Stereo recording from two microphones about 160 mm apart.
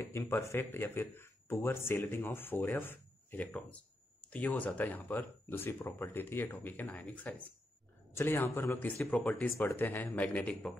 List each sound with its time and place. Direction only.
0.0 s speech: 15° left (ahead or behind)